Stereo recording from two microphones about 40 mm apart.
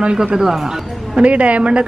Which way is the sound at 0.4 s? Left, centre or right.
Centre.